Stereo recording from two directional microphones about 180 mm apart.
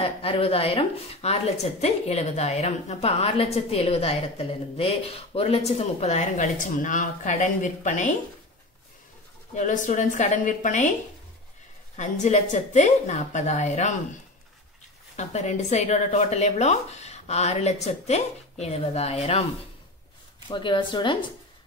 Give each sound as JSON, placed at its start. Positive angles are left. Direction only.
{"t": 0.0, "sound": "a woman's voice", "side_deg": 30}
{"t": 9.6, "sound": "a woman's voice", "side_deg": 45}
{"t": 12.0, "sound": "a woman's voice", "side_deg": 40}
{"t": 15.1, "sound": "a woman's voice", "side_deg": 40}
{"t": 20.4, "sound": "speech", "side_deg": 25}